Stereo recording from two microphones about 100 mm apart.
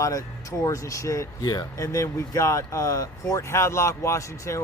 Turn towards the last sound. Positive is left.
turn(degrees=30)  # may be behind; listen again after turning